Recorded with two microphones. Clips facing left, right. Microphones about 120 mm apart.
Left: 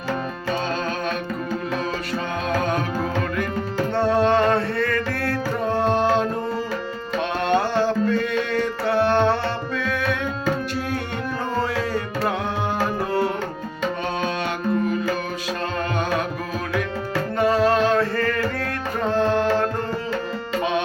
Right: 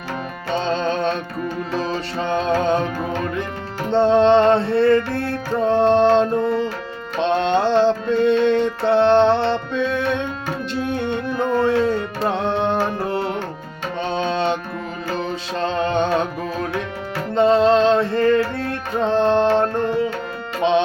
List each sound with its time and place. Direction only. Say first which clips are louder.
0.5 s tabla: right 6 dB; 25° right (ahead or behind)
2.1 s music: right 5 dB; 25° right (ahead or behind)
3.9 s music: right 6 dB; 25° right (ahead or behind)
15.6 s music: right 7 dB; 25° right (ahead or behind)
17.3 s music: right 5 dB; 25° right (ahead or behind)